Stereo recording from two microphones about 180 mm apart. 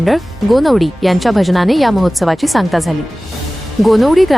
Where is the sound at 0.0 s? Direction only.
Centre (ahead or behind).